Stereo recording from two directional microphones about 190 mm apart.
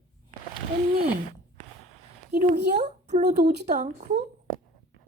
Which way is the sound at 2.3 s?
40° right (ahead or behind).